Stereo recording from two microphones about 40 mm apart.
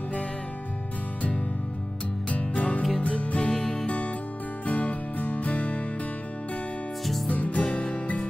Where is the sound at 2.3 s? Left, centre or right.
Left.